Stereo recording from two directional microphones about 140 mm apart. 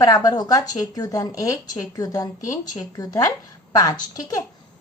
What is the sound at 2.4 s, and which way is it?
Speech, 60° left (ahead or behind).